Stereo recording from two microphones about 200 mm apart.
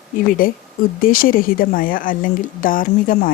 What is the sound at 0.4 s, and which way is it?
Speech, 45° left (ahead or behind).